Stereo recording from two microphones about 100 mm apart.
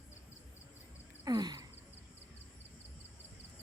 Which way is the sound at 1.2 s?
45° right (ahead or behind).